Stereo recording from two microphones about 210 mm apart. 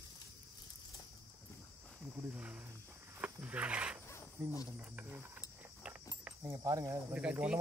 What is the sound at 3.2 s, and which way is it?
Wild animals, 5° right (ahead or behind).